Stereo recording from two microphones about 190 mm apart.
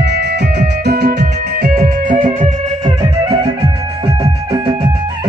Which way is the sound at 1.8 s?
40° right (ahead or behind).